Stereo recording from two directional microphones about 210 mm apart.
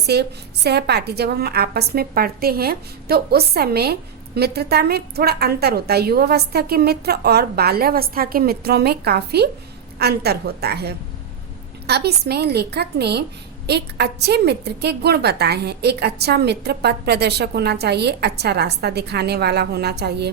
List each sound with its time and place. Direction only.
0.0 s a woman's voice: 50° right (ahead or behind)